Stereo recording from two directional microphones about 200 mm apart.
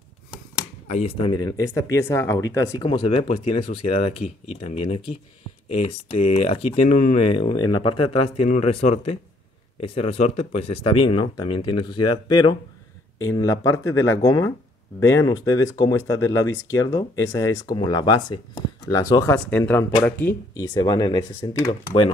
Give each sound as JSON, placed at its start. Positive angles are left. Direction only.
{"t": 0.8, "sound": "speech", "side_deg": 30}
{"t": 20.7, "sound": "speech", "side_deg": 20}